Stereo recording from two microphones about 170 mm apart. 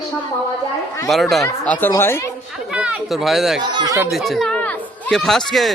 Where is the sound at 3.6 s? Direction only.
25° right (ahead or behind).